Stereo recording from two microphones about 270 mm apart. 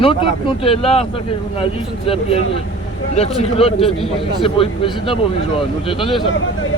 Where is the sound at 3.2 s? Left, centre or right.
Left.